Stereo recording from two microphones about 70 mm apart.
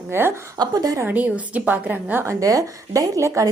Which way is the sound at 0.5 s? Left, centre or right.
Right.